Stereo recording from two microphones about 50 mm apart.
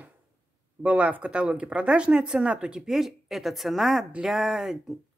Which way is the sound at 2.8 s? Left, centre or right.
Centre.